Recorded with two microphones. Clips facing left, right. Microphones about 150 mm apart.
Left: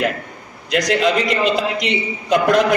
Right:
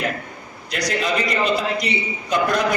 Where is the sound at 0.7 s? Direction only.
90° left.